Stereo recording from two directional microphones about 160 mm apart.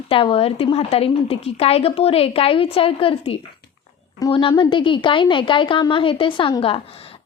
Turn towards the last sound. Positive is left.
turn(degrees=35)  # may be behind; listen again after turning